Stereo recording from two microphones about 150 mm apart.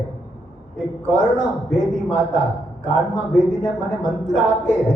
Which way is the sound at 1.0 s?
55° right (ahead or behind).